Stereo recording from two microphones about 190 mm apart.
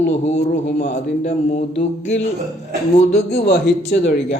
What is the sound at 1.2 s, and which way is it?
Speech, 35° left (ahead or behind).